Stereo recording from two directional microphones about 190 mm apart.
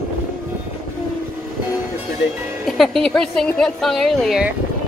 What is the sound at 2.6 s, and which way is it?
A woman's voice, centre (ahead or behind).